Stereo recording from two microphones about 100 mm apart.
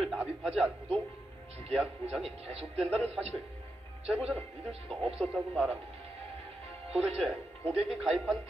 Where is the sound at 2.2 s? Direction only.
85° right.